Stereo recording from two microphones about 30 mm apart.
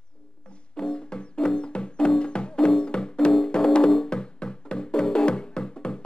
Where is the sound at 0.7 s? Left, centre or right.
Left.